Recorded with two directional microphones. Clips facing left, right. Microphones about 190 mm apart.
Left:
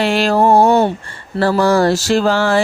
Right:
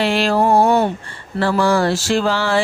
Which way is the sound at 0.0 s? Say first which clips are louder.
Left 3 dB; 45° left (ahead or behind).